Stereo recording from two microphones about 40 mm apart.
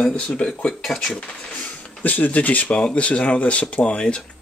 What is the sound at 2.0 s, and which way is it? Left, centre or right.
Speech, left.